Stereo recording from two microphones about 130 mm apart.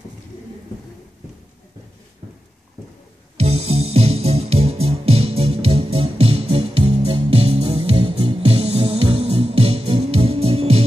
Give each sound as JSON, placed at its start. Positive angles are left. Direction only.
{"t": 3.3, "sound": "music", "side_deg": -50}